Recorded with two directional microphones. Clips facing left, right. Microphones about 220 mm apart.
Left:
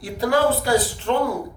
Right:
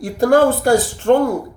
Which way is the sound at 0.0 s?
50° right (ahead or behind).